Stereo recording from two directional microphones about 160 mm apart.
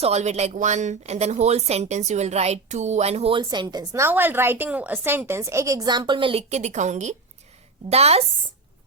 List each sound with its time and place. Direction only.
0.0 s a woman's voice: 45° right (ahead or behind)